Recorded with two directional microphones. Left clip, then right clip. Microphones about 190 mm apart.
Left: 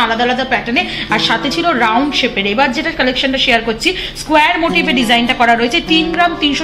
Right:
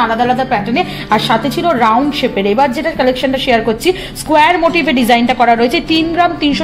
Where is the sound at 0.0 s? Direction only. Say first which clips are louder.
Right 1 dB; 60° right (ahead or behind).